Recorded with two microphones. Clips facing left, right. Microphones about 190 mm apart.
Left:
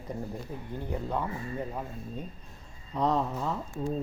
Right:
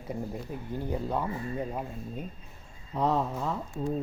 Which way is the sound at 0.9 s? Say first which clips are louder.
Even; 10° right (ahead or behind).